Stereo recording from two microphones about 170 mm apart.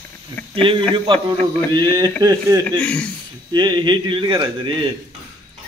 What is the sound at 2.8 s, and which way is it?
Speech, 5° left (ahead or behind).